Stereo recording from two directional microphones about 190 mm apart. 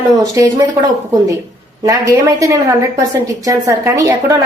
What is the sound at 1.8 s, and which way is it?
A woman's voice, 15° right (ahead or behind).